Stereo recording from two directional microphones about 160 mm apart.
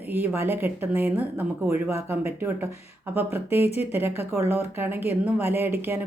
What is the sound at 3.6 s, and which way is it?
Speech, 40° left (ahead or behind).